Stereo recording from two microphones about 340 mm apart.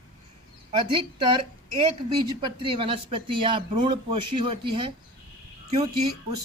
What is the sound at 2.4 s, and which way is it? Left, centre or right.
Speech, centre.